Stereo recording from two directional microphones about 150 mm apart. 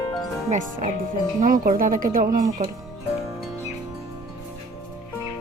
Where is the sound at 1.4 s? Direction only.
70° right (ahead or behind).